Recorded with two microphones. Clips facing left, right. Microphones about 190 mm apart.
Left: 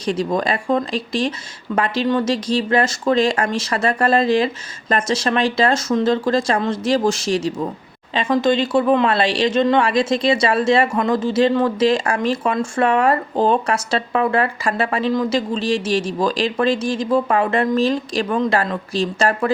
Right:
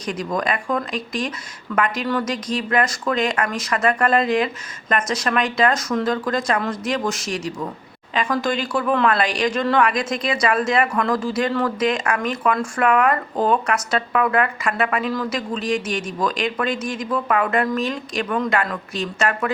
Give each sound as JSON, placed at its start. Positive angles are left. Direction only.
{"t": 0.0, "sound": "speech", "side_deg": 30}